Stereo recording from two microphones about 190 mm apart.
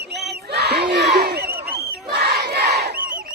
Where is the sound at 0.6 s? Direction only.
60° right (ahead or behind).